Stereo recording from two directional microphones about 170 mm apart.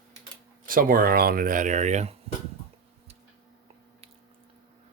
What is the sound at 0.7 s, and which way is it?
Speech, 55° right (ahead or behind).